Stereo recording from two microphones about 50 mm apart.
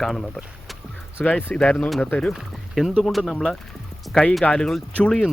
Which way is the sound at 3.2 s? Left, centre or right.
Centre.